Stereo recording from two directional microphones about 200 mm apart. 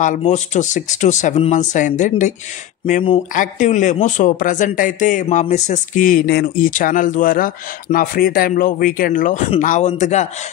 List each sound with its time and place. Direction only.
0.0 s speech: 35° left (ahead or behind)